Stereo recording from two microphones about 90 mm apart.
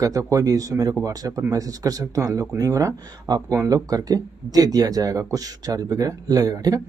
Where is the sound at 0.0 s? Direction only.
40° right (ahead or behind).